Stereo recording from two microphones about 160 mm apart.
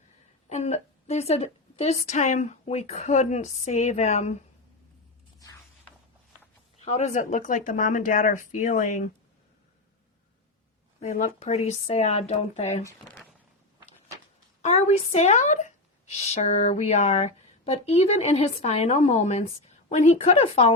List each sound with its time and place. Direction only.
0.4 s a woman's voice: 45° left (ahead or behind)
6.7 s a woman's voice: 45° left (ahead or behind)
11.0 s a woman's voice: 50° left (ahead or behind)
14.6 s a woman's voice: 45° left (ahead or behind)